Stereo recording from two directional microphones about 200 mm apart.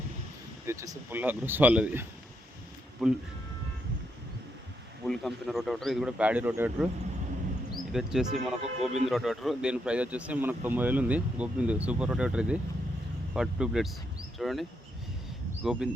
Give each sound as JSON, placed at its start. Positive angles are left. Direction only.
{"t": 0.6, "sound": "speech", "side_deg": -15}
{"t": 5.0, "sound": "speech", "side_deg": 0}
{"t": 7.9, "sound": "speech", "side_deg": 0}